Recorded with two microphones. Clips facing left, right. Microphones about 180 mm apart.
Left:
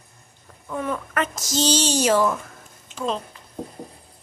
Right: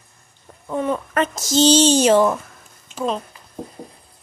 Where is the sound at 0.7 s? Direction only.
25° right (ahead or behind).